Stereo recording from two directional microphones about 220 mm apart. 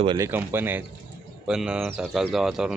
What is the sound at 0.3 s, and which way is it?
Speech, 10° right (ahead or behind).